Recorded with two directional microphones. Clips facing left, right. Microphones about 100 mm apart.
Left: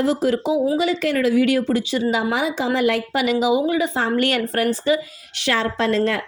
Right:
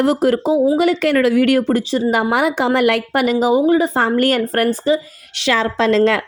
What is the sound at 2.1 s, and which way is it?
A woman's voice, 60° right (ahead or behind).